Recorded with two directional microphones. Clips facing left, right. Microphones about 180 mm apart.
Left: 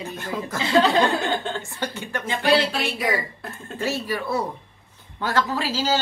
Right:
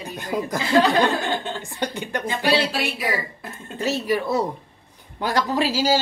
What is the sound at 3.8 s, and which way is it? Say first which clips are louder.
Speech: right 4 dB; 15° right (ahead or behind).